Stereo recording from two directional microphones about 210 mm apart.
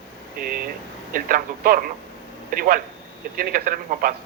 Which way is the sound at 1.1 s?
40° right (ahead or behind).